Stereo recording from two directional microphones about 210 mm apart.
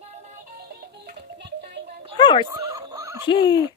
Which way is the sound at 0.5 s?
50° right (ahead or behind).